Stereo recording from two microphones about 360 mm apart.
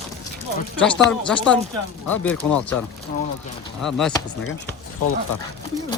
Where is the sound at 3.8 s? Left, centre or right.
Centre.